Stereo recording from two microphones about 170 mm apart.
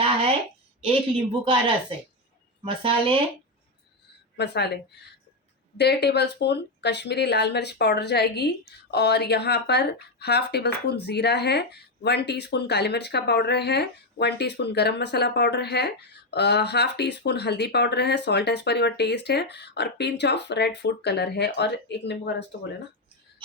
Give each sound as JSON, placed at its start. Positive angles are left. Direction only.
{"t": 0.8, "sound": "speech", "side_deg": -30}
{"t": 4.4, "sound": "speech", "side_deg": 80}